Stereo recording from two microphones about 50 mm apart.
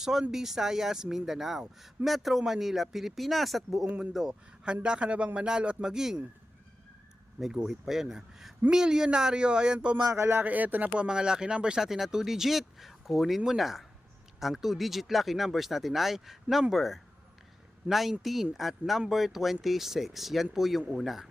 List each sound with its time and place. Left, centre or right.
0.0 s speech: centre
4.1 s a man's voice: centre
7.6 s speech: centre
10.4 s speech: right
10.9 s speech: centre